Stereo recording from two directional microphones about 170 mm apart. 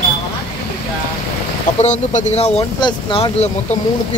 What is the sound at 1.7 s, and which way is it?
Speech, 45° left (ahead or behind).